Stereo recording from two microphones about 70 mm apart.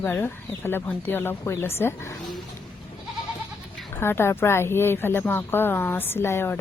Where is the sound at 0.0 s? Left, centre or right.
Left.